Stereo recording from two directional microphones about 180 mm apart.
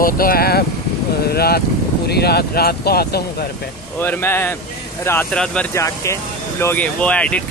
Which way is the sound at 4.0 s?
10° left (ahead or behind).